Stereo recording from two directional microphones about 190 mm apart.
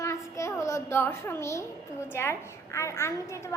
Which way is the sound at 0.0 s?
15° left (ahead or behind).